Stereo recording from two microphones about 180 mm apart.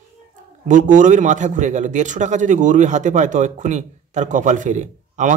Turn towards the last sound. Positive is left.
turn(degrees=-45)  # may be behind; listen again after turning